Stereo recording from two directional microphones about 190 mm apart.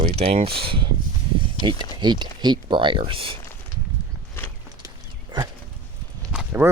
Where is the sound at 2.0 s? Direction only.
25° right (ahead or behind).